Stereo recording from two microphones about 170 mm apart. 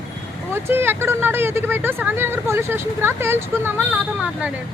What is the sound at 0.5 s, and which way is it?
Speech, 15° right (ahead or behind).